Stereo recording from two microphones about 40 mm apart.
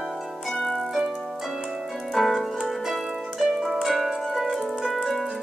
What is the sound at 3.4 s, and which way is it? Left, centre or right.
Harp, centre.